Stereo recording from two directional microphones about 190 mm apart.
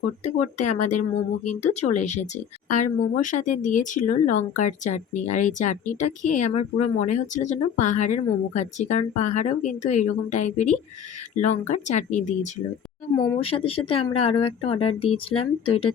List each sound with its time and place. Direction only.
0.3 s speech: 40° left (ahead or behind)